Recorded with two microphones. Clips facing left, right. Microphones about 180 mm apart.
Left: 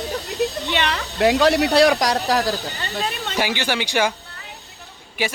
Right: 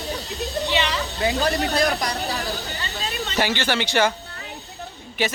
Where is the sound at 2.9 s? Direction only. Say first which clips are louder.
Left 4 dB; 55° left (ahead or behind).